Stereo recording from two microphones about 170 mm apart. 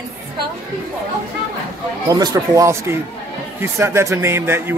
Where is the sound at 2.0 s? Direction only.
20° right (ahead or behind).